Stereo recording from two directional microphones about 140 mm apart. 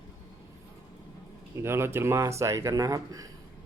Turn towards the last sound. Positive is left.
turn(degrees=-25)  # may be behind; listen again after turning